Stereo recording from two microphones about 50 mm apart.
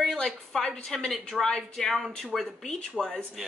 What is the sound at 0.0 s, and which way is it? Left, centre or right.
A woman's voice, centre.